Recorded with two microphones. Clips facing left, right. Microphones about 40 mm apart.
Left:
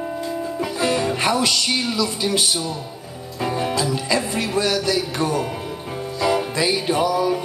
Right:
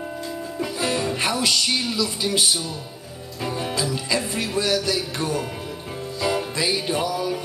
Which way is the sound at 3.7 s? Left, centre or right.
Centre.